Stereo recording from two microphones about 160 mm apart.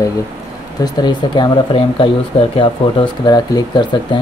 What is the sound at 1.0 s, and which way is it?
Speech, 30° left (ahead or behind).